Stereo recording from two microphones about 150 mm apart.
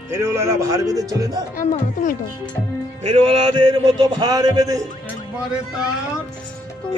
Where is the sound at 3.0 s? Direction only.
40° right (ahead or behind); by 4.8 s 25° right (ahead or behind).